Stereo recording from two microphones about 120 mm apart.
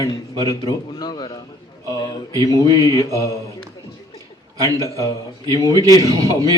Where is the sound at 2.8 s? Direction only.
30° left (ahead or behind).